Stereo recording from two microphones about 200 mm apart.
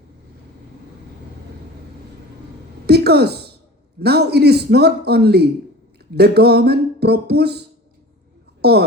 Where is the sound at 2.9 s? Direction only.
55° right (ahead or behind).